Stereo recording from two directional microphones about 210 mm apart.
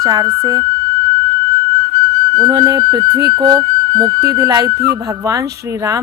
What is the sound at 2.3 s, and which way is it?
Speech, 15° right (ahead or behind).